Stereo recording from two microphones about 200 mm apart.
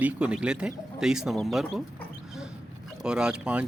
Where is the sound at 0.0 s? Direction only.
5° right (ahead or behind).